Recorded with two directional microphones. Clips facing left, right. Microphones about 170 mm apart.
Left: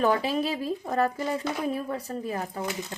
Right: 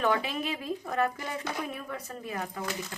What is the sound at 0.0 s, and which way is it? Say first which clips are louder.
Speech: left 4 dB; 35° left (ahead or behind).